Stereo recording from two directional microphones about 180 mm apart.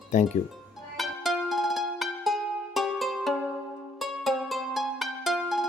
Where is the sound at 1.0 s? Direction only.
Centre (ahead or behind).